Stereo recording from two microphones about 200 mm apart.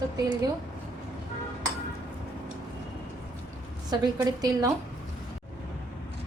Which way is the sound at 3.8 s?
20° right (ahead or behind).